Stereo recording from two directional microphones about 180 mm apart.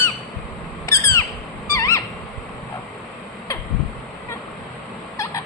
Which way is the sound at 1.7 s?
15° left (ahead or behind).